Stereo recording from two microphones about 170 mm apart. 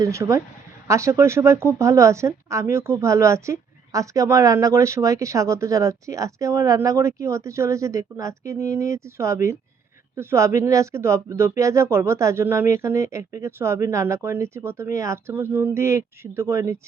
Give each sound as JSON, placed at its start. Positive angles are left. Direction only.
{"t": 0.0, "sound": "speech", "side_deg": -15}